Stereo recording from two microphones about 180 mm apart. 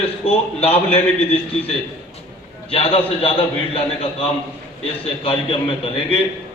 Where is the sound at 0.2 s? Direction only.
35° left (ahead or behind).